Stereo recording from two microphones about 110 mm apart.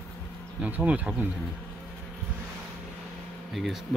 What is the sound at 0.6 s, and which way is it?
Bee, 15° right (ahead or behind).